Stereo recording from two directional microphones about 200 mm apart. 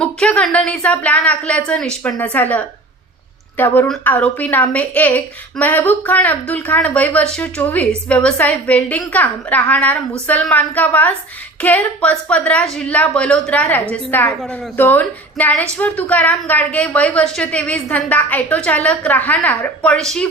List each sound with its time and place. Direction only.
0.0 s a woman's voice: 5° left (ahead or behind)